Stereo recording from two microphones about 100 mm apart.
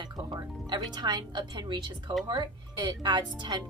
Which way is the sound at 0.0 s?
45° right (ahead or behind).